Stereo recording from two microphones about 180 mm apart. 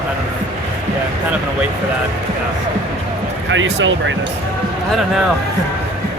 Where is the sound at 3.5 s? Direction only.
90° right.